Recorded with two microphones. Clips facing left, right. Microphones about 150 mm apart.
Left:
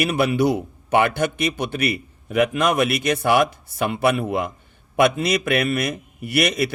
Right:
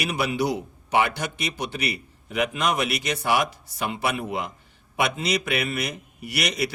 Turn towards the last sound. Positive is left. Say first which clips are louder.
# left 6 dB
turn(degrees=55)  # may be behind; listen again after turning